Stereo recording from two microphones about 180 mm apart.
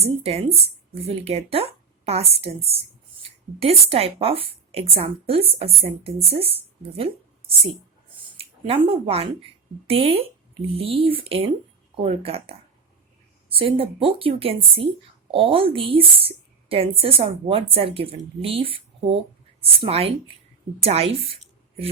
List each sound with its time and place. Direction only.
0.0 s a woman's voice: 35° right (ahead or behind)
8.4 s a woman's voice: 30° right (ahead or behind)